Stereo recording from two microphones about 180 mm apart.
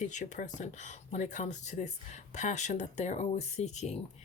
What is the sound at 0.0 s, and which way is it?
Speech, 40° left (ahead or behind).